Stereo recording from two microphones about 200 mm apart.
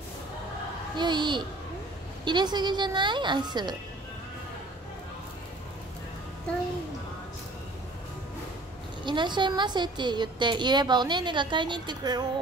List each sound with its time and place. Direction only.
0.9 s a woman's voice: 20° right (ahead or behind)
9.0 s a woman's voice: 25° right (ahead or behind)